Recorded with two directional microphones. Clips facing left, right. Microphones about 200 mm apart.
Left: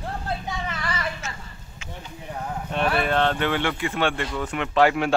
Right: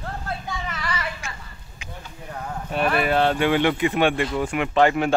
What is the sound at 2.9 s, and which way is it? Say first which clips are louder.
Speech: right 3 dB; 5° right (ahead or behind).